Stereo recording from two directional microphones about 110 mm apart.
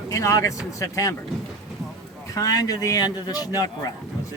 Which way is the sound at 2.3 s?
30° left (ahead or behind).